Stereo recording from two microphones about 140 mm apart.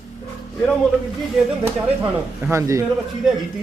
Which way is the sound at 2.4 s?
20° right (ahead or behind).